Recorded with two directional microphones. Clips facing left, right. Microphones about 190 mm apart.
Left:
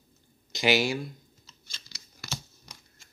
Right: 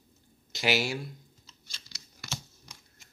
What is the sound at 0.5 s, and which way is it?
Speech, 5° right (ahead or behind).